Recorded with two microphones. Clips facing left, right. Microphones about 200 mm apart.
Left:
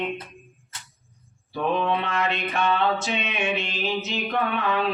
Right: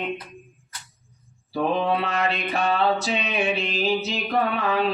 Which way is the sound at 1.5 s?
35° right (ahead or behind).